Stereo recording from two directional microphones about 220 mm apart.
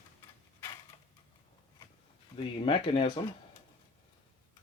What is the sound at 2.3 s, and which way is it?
Speech, 25° left (ahead or behind).